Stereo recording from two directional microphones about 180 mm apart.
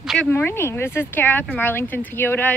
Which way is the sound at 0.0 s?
Centre (ahead or behind).